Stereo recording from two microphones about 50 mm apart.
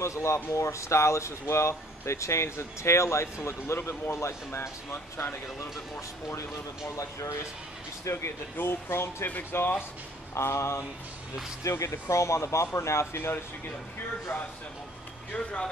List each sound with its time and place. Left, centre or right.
0.0 s speech: left
7.0 s speech: left
8.0 s speech: left
8.5 s speech: left
10.3 s speech: left
11.8 s speech: left
15.3 s speech: centre